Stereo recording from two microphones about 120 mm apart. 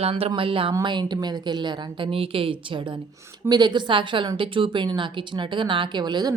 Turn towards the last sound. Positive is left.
turn(degrees=-35)  # may be behind; listen again after turning